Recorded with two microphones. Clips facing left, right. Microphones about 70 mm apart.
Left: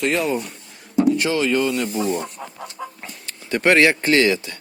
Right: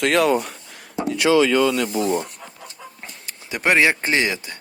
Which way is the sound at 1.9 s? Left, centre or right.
Right.